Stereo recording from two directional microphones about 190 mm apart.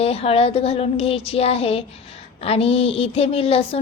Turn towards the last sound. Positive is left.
turn(degrees=30)  # may be behind; listen again after turning